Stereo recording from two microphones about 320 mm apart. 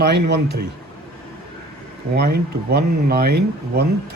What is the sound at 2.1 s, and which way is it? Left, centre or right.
Speech, right.